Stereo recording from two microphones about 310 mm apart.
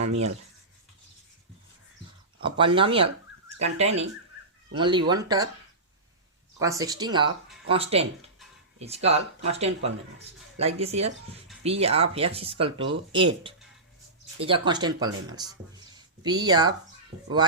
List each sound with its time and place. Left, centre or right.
2.4 s speech: centre
6.6 s speech: centre